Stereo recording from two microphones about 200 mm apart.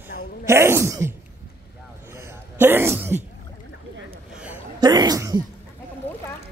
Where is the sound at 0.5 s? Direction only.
15° right (ahead or behind).